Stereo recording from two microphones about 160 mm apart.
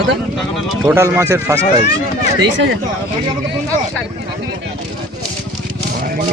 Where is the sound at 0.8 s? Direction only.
20° right (ahead or behind).